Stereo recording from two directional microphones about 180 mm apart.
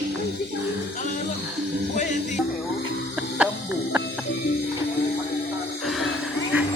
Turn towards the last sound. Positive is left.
turn(degrees=-5)  # may be behind; listen again after turning